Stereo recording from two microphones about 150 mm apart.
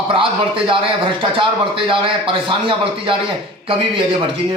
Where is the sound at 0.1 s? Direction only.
35° right (ahead or behind).